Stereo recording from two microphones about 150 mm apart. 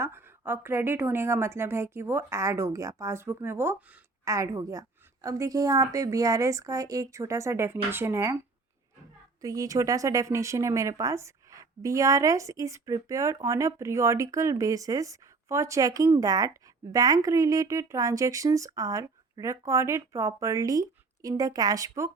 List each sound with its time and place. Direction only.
0.0 s a woman's voice: 15° right (ahead or behind)
9.4 s speech: 25° right (ahead or behind)